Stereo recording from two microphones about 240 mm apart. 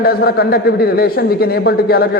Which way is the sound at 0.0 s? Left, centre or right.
Left.